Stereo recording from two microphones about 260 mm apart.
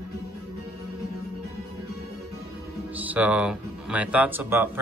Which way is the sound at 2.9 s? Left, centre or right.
Centre.